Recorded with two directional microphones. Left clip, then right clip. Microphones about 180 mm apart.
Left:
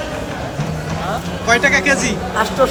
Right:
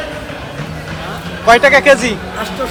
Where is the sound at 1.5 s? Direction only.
5° right (ahead or behind).